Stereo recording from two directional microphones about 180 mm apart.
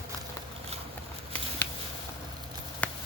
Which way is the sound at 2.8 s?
5° left (ahead or behind).